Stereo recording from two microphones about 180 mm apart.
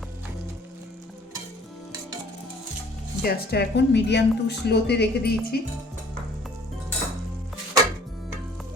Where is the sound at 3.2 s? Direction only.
60° left (ahead or behind).